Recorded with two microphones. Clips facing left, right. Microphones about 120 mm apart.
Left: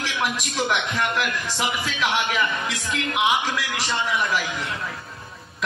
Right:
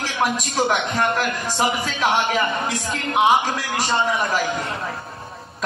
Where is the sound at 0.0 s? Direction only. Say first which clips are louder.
Right 4 dB; 40° right (ahead or behind).